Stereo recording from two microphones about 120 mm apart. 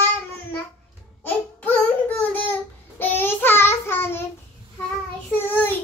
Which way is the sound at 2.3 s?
15° left (ahead or behind).